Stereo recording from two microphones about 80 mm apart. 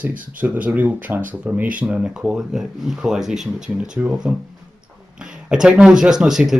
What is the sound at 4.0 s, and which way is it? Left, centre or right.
Speech, centre.